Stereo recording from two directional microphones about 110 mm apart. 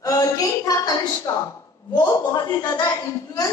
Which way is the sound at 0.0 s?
30° left (ahead or behind).